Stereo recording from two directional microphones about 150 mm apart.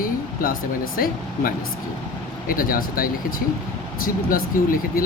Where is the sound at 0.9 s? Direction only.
75° left (ahead or behind).